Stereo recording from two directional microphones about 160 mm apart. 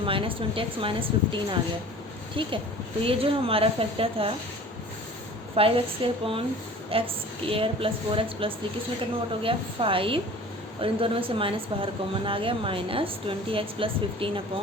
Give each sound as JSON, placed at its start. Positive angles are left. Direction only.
{"t": 0.0, "sound": "a woman's voice", "side_deg": -35}
{"t": 5.5, "sound": "a woman's voice", "side_deg": -35}